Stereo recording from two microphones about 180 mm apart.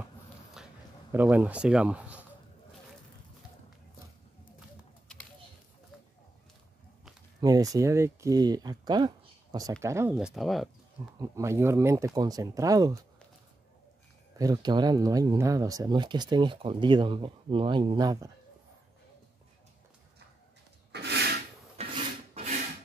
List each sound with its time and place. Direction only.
0.6 s a sound: 5° right (ahead or behind)
1.1 s speech: 10° right (ahead or behind)
7.4 s speech: 20° right (ahead or behind)
10.1 s speech: centre (ahead or behind)
11.1 s speech: 15° right (ahead or behind)
14.4 s speech: 20° right (ahead or behind)
20.9 s rub: 65° right (ahead or behind)
21.8 s filing: 35° right (ahead or behind)